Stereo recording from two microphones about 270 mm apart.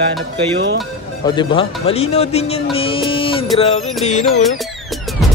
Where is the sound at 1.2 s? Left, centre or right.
Centre.